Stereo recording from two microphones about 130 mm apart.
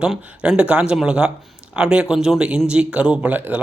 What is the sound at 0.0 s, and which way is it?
Speech, 5° right (ahead or behind).